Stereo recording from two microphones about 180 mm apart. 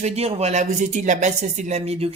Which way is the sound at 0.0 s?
35° right (ahead or behind).